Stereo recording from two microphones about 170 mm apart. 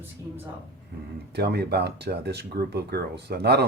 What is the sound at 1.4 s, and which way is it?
Speech, 75° right (ahead or behind).